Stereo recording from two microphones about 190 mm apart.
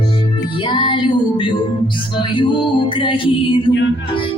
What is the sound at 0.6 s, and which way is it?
Music, 25° left (ahead or behind).